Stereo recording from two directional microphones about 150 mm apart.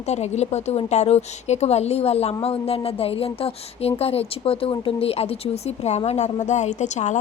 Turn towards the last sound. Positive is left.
turn(degrees=50)  # may be behind; listen again after turning